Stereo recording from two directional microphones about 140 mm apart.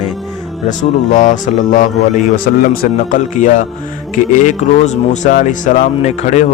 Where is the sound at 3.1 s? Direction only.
65° left (ahead or behind).